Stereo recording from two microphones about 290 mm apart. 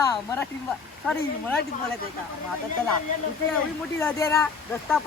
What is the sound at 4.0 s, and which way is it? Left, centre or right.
Speech, centre.